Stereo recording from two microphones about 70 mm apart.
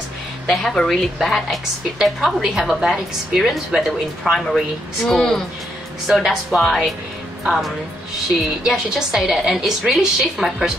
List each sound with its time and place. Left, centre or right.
0.5 s a woman's voice: centre